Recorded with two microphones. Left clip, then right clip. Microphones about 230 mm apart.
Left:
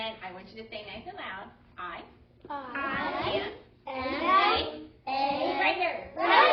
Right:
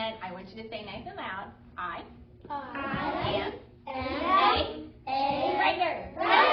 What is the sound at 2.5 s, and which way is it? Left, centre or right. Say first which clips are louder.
Music: even; left.